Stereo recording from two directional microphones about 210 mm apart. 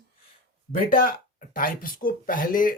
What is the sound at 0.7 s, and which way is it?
Speech, 45° left (ahead or behind).